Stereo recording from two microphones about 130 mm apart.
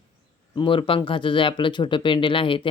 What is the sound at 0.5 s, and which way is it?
Speech, 40° left (ahead or behind).